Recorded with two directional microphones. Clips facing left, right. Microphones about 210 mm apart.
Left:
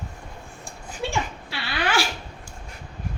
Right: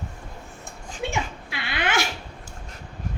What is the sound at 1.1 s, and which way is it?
Dog, 20° right (ahead or behind).